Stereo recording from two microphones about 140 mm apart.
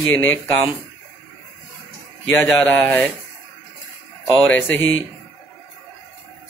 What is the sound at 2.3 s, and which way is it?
Speech, 15° left (ahead or behind).